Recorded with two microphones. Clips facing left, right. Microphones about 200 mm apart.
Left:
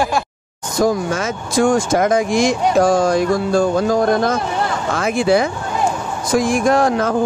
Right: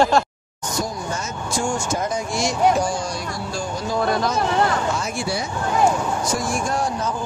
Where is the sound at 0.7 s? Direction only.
90° left.